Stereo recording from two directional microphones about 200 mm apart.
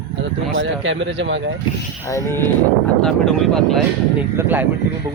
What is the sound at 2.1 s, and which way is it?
Speech, 15° left (ahead or behind).